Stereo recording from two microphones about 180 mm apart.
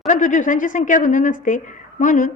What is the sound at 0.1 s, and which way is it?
Speech, 45° left (ahead or behind).